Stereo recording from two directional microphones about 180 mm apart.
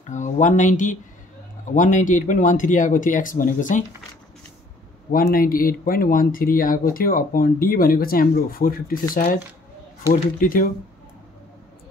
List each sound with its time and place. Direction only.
0.0 s speech: 45° left (ahead or behind)
5.1 s speech: 50° left (ahead or behind)
10.4 s speech: 50° left (ahead or behind)